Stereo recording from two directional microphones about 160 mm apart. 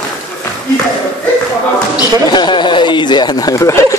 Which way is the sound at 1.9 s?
25° left (ahead or behind).